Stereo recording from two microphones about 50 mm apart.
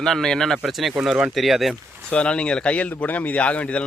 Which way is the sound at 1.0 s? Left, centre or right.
Centre.